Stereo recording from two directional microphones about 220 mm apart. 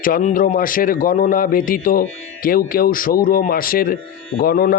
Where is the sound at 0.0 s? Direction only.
35° left (ahead or behind).